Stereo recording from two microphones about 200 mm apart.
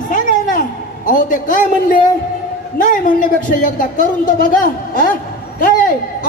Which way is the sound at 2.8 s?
40° left (ahead or behind).